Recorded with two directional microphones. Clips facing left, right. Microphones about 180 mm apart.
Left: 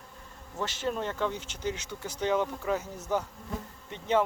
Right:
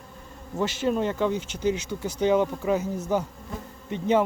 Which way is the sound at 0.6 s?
10° right (ahead or behind).